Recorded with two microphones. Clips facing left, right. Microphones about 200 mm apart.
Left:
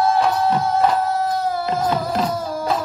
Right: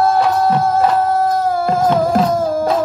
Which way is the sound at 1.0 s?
45° right (ahead or behind).